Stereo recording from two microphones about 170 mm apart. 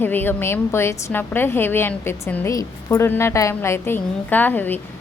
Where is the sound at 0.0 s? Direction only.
10° left (ahead or behind).